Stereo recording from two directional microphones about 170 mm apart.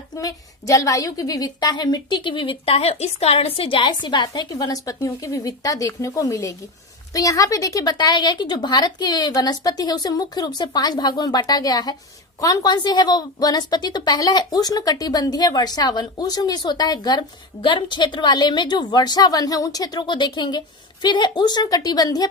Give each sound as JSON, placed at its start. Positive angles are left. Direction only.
{"t": 0.1, "sound": "a woman's voice", "side_deg": 20}